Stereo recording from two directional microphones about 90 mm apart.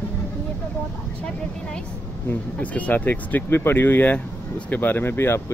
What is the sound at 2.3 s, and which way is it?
Speech, 15° left (ahead or behind).